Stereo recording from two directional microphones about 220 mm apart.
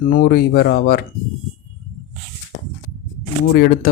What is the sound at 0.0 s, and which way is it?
Speech, 40° left (ahead or behind).